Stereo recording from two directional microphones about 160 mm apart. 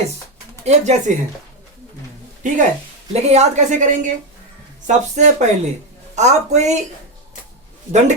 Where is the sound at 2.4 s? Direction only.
55° right (ahead or behind).